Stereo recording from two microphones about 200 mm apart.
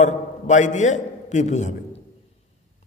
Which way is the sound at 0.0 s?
40° left (ahead or behind).